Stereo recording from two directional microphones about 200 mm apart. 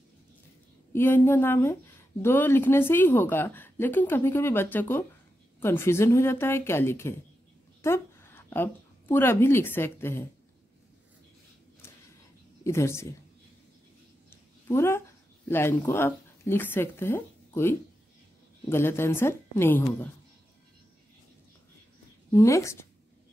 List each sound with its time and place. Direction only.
0.9 s a woman's voice: 10° left (ahead or behind)
12.6 s a woman's voice: 15° left (ahead or behind)
14.3 s a woman's voice: 10° left (ahead or behind)
22.3 s a woman's voice: 15° left (ahead or behind)